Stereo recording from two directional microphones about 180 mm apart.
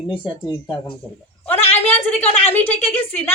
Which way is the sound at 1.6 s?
10° left (ahead or behind).